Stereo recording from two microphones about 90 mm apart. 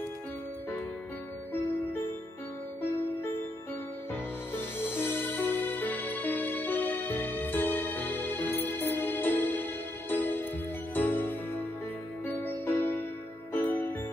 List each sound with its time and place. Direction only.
4.1 s music: 25° left (ahead or behind)